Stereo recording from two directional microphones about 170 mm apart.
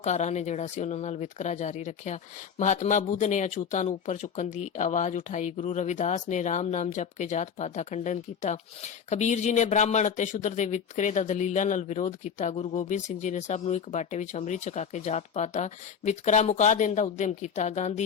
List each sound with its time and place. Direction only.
0.0 s speech: 40° left (ahead or behind)